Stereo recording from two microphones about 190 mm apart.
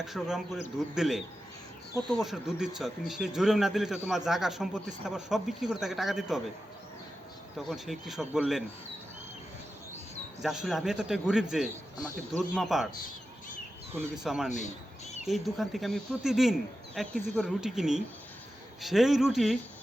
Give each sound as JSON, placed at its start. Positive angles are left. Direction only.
{"t": 0.0, "sound": "speech", "side_deg": 0}
{"t": 7.7, "sound": "speech", "side_deg": 0}
{"t": 10.4, "sound": "speech", "side_deg": 0}
{"t": 13.9, "sound": "speech", "side_deg": 0}
{"t": 14.5, "sound": "a sound", "side_deg": 40}
{"t": 15.2, "sound": "speech", "side_deg": 0}